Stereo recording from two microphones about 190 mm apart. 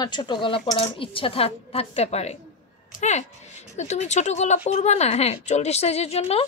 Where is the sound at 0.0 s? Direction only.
25° left (ahead or behind).